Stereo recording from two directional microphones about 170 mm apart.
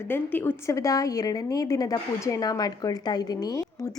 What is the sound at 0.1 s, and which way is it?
A woman's voice, 10° left (ahead or behind).